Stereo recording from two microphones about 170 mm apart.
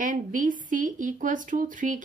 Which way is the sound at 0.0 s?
50° right (ahead or behind).